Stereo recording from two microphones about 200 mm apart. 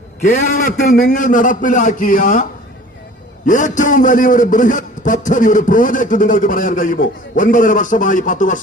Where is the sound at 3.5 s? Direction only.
40° left (ahead or behind).